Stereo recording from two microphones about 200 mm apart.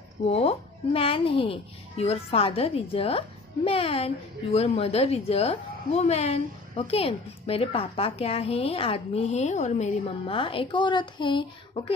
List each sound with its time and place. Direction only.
0.2 s a child's voice: 30° left (ahead or behind)